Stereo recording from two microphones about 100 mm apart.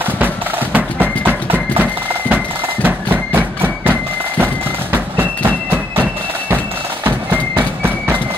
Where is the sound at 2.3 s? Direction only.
20° right (ahead or behind).